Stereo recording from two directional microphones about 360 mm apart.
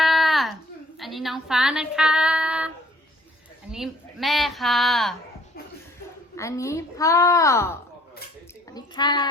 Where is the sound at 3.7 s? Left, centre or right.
Centre.